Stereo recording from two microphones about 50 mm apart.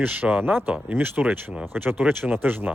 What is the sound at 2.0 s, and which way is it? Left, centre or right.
Speech, right.